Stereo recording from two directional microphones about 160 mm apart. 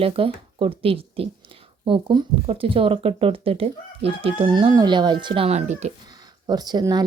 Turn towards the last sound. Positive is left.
turn(degrees=-25)  # may be behind; listen again after turning